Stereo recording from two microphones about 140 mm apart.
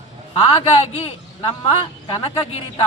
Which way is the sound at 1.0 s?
45° left (ahead or behind).